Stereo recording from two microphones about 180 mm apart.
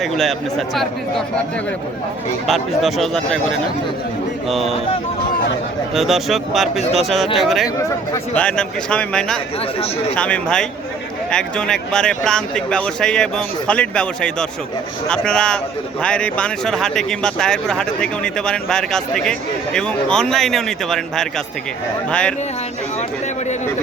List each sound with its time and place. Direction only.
0.0 s speech: centre (ahead or behind)
2.5 s speech: centre (ahead or behind)
5.9 s speech: centre (ahead or behind)
7.8 s speech: 15° left (ahead or behind)
8.4 s speech: 5° left (ahead or behind)